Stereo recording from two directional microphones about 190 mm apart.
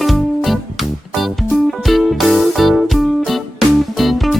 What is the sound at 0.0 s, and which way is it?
Music, centre (ahead or behind).